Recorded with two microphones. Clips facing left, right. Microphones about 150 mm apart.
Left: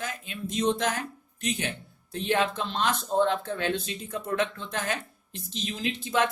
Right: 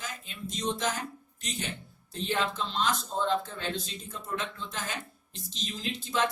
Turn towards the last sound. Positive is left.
turn(degrees=60)  # may be behind; listen again after turning